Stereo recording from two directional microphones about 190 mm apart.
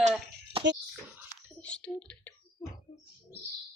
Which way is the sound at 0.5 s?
30° right (ahead or behind).